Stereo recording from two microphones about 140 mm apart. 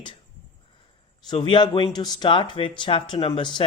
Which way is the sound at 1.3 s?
35° left (ahead or behind).